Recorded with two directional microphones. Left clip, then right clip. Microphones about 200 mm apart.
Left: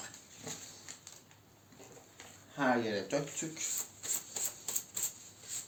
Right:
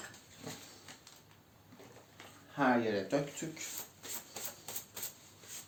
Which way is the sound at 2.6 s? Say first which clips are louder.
Right 1 dB; 10° right (ahead or behind).